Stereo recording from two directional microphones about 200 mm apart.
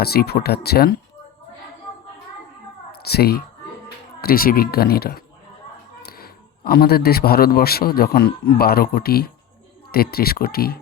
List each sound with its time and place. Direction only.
0.0 s speech: 50° left (ahead or behind)
2.9 s a woman's voice: 50° left (ahead or behind)